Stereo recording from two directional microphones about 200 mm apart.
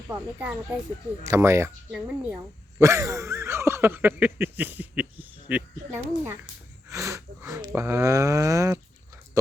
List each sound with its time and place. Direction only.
0.3 s speech: 5° right (ahead or behind)